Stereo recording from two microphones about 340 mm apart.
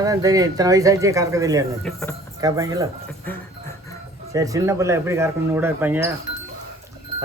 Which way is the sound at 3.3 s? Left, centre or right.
Centre.